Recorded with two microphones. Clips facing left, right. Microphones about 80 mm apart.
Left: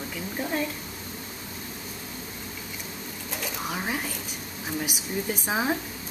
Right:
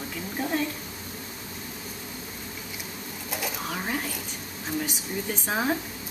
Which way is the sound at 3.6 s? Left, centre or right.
Centre.